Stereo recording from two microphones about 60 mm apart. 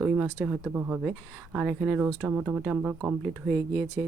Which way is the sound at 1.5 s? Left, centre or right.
Centre.